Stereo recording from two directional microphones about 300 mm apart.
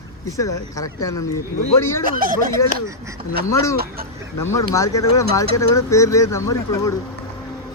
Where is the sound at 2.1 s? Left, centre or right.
Right.